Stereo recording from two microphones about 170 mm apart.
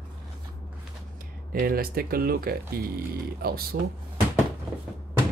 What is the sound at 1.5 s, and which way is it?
Speech, 60° right (ahead or behind).